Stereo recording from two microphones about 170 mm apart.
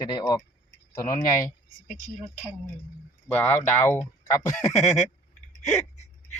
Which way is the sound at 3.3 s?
10° left (ahead or behind).